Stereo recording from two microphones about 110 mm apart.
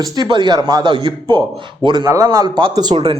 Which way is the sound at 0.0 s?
40° right (ahead or behind).